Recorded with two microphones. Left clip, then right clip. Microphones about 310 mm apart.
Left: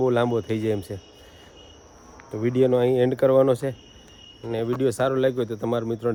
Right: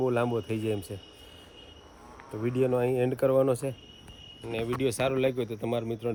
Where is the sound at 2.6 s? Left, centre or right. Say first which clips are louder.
Left 7 dB; left.